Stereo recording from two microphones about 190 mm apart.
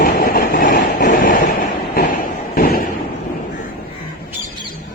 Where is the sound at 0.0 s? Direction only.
50° left (ahead or behind).